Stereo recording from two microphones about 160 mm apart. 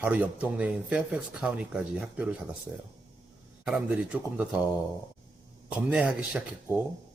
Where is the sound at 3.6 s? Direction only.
5° right (ahead or behind).